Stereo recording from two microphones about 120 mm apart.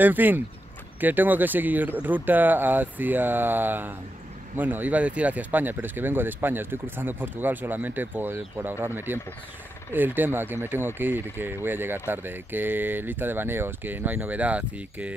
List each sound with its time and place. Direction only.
0.0 s speech: 15° right (ahead or behind)